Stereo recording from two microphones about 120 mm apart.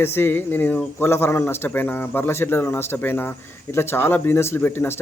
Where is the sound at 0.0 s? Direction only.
20° left (ahead or behind).